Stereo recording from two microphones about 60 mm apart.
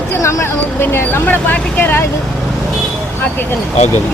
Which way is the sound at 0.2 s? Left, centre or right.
Left.